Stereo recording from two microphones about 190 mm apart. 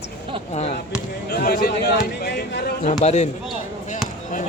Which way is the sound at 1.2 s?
55° left (ahead or behind).